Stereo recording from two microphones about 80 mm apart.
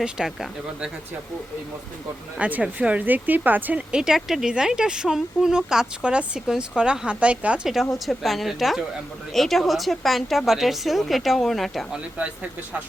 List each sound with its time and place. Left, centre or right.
0.0 s speech: centre
2.4 s speech: centre
3.9 s speech: centre
7.7 s a woman's voice: centre
11.9 s speech: centre